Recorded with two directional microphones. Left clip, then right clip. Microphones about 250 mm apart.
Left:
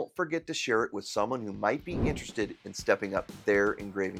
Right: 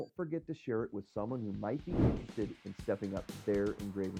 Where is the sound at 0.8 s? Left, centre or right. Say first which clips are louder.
Left 7 dB; centre.